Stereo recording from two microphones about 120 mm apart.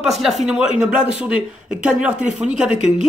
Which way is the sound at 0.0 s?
Centre (ahead or behind).